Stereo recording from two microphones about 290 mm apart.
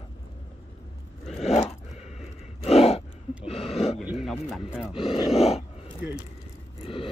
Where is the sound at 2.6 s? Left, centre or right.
Left.